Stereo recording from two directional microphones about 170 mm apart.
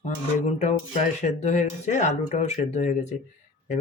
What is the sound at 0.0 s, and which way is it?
Speech, 45° left (ahead or behind).